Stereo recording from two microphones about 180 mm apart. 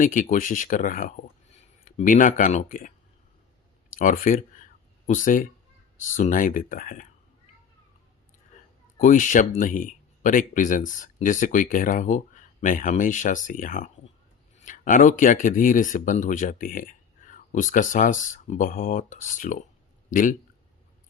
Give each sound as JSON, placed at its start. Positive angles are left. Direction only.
{"t": 0.0, "sound": "speech", "side_deg": 45}
{"t": 3.9, "sound": "a sound", "side_deg": 45}
{"t": 6.0, "sound": "speech", "side_deg": 45}
{"t": 9.0, "sound": "speech", "side_deg": 45}